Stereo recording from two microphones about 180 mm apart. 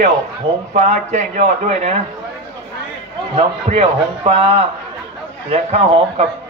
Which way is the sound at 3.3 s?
35° right (ahead or behind).